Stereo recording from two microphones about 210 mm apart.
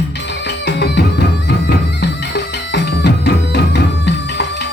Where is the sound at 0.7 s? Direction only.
55° left (ahead or behind).